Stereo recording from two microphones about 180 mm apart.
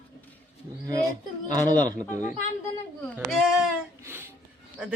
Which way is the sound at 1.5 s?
20° right (ahead or behind).